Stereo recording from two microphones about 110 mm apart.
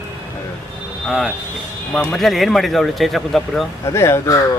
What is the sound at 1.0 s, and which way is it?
Speech, 5° left (ahead or behind).